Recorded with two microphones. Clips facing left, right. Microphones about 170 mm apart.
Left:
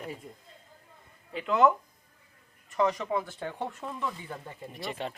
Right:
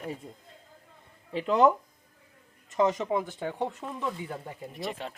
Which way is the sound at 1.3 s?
35° right (ahead or behind).